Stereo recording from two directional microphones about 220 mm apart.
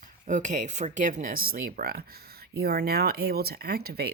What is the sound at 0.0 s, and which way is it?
Speech, 35° right (ahead or behind).